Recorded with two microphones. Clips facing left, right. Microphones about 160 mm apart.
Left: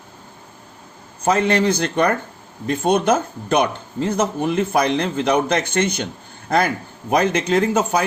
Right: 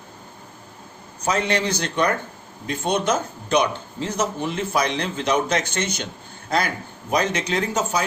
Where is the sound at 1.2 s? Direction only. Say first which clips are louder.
Left 5 dB; 50° left (ahead or behind).